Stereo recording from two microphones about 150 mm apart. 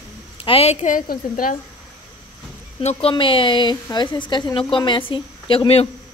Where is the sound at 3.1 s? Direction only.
35° left (ahead or behind).